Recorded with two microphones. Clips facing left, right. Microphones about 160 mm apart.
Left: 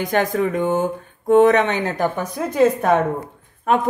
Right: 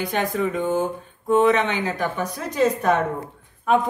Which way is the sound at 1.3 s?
50° left (ahead or behind).